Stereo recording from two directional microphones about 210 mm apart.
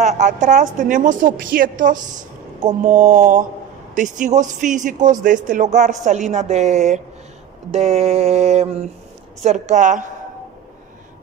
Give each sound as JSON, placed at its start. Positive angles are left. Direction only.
{"t": 0.0, "sound": "a man's voice", "side_deg": -35}
{"t": 7.7, "sound": "mantra", "side_deg": -30}
{"t": 9.4, "sound": "a man's voice", "side_deg": -35}